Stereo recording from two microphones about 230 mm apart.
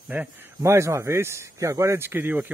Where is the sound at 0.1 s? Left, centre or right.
Centre.